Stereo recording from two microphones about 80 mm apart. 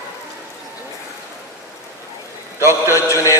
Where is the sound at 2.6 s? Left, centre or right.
Left.